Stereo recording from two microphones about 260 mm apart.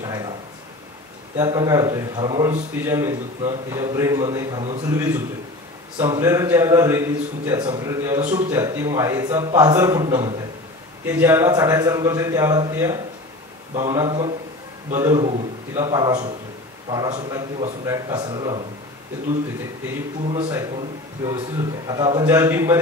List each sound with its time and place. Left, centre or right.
0.0 s a sound: centre
1.3 s a man's voice: centre
20.2 s a man's voice: right